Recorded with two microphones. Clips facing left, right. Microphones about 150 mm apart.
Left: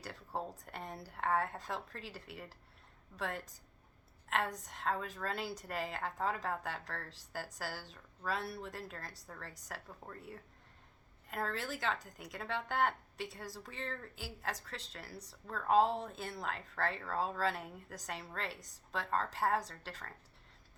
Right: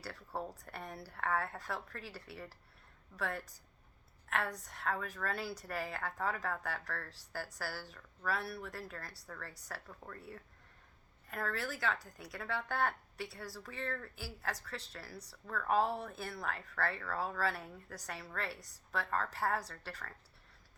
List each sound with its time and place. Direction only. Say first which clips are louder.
0.0 s a woman's voice: even; 20° left (ahead or behind)